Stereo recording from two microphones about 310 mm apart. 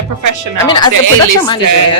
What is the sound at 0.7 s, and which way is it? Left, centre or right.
Speech, centre.